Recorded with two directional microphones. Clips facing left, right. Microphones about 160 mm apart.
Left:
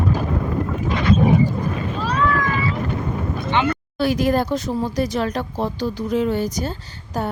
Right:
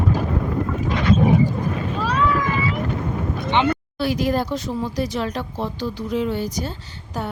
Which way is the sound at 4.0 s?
50° left (ahead or behind).